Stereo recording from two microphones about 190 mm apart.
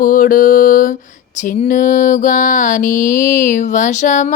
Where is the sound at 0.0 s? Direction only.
45° left (ahead or behind).